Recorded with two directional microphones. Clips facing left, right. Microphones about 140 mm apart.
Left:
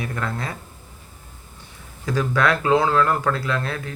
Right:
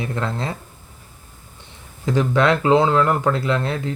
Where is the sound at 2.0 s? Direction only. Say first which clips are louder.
Right 3 dB; 20° right (ahead or behind).